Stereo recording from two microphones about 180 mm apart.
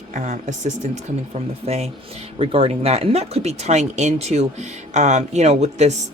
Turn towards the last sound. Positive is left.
turn(degrees=-40)  # may be behind; listen again after turning